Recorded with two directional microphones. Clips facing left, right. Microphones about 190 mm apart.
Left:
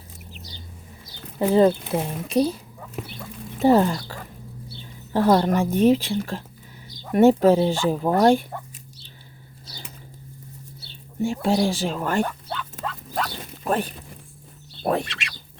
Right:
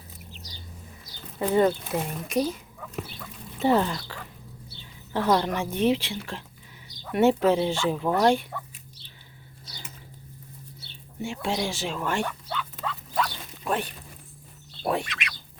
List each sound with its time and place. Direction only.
1.4 s speech: 30° left (ahead or behind)
3.6 s speech: 40° left (ahead or behind)
11.2 s speech: 40° left (ahead or behind)
14.8 s speech: 35° left (ahead or behind)